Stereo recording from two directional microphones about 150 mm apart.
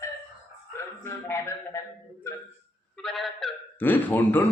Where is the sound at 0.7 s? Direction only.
15° left (ahead or behind).